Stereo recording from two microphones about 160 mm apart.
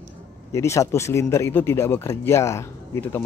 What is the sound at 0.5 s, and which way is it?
Speech, 15° left (ahead or behind).